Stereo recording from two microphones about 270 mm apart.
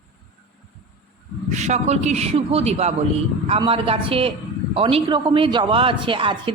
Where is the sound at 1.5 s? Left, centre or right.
Right.